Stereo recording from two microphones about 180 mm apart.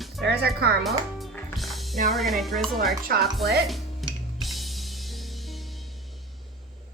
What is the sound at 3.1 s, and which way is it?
Speech, 60° right (ahead or behind).